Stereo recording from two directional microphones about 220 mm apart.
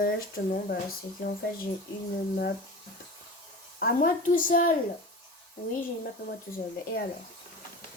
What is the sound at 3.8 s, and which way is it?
Speech, 40° left (ahead or behind).